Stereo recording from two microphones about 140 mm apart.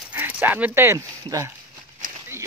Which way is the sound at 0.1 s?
10° right (ahead or behind).